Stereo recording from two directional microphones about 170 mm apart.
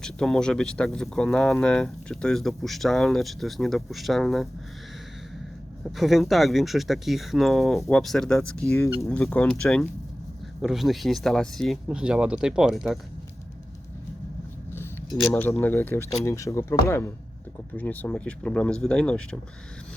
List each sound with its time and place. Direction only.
0.0 s speech: 5° left (ahead or behind)
6.0 s speech: centre (ahead or behind)
15.2 s speech: 10° left (ahead or behind)
17.7 s speech: 10° left (ahead or behind)